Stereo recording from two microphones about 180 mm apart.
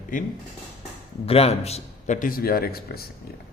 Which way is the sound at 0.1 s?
50° left (ahead or behind).